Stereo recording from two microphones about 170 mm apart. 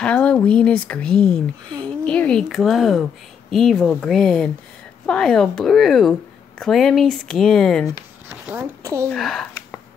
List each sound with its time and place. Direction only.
0.0 s speech: 5° left (ahead or behind)
8.3 s a woman's voice: 15° right (ahead or behind)
9.1 s speech: centre (ahead or behind)